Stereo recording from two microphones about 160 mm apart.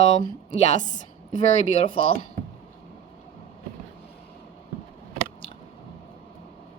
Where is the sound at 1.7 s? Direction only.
35° left (ahead or behind).